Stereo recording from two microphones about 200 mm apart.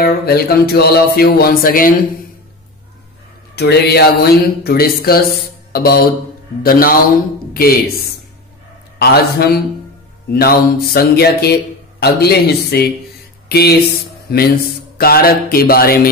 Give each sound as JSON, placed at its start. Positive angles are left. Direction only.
{"t": 0.0, "sound": "speech", "side_deg": 50}
{"t": 3.5, "sound": "speech", "side_deg": 55}